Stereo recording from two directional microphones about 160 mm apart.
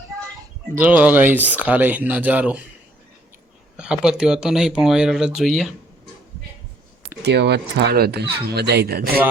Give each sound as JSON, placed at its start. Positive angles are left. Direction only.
{"t": 0.8, "sound": "speech", "side_deg": -10}
{"t": 3.8, "sound": "speech", "side_deg": -5}
{"t": 7.2, "sound": "speech", "side_deg": -90}